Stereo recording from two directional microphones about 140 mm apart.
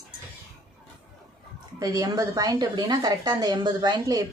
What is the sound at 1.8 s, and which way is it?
Speech, 25° right (ahead or behind).